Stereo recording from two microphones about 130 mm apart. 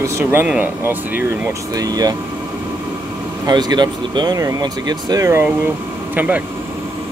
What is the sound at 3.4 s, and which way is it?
Speech, 30° right (ahead or behind).